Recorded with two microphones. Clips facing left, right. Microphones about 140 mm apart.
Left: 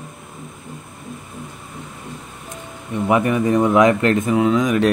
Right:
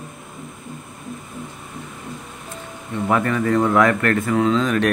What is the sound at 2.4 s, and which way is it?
Speech, 15° left (ahead or behind).